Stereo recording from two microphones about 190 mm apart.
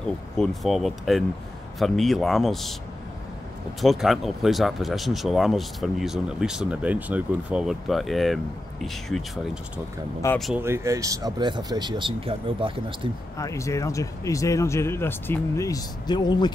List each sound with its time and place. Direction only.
0.4 s speech: centre (ahead or behind)
3.8 s speech: centre (ahead or behind)
10.2 s speech: 15° left (ahead or behind)
10.6 s speech: 15° right (ahead or behind)
13.4 s speech: 15° left (ahead or behind)